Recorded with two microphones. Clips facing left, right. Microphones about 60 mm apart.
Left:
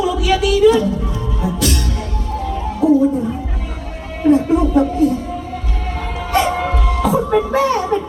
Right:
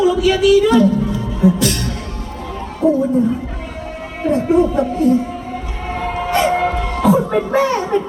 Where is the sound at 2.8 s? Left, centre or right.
Centre.